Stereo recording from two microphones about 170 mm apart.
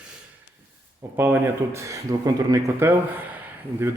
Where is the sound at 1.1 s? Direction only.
15° right (ahead or behind).